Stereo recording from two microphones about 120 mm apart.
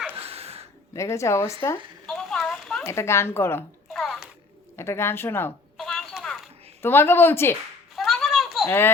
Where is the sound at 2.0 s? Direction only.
5° left (ahead or behind).